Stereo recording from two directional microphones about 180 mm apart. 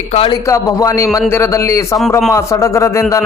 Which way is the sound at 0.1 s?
30° left (ahead or behind).